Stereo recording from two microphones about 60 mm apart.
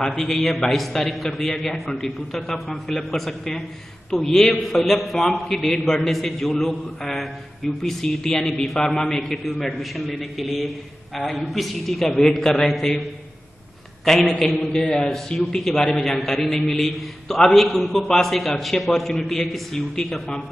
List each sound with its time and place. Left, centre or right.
0.0 s a man's voice: centre
14.0 s a man's voice: centre
14.7 s a man's voice: centre